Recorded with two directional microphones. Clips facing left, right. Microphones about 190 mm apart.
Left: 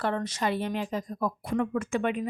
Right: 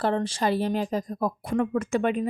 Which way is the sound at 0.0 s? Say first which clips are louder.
Right 4 dB; 30° right (ahead or behind).